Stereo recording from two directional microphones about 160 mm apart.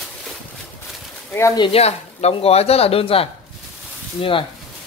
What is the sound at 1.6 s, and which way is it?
Speech, 40° left (ahead or behind).